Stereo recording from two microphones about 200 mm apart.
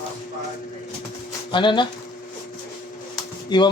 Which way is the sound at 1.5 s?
25° left (ahead or behind).